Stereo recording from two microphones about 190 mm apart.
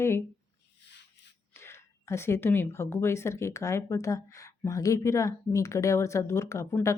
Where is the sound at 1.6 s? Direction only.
15° left (ahead or behind).